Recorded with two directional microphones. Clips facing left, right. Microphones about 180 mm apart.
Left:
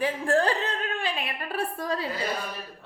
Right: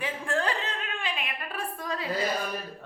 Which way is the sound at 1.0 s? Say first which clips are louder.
Left 3 dB; 35° left (ahead or behind).